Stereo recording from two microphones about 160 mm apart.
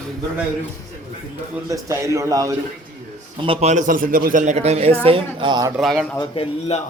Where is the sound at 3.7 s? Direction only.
55° right (ahead or behind); by 5.7 s 30° right (ahead or behind).